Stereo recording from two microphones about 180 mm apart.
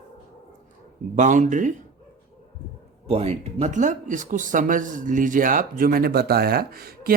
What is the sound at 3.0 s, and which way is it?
Speech, 35° right (ahead or behind).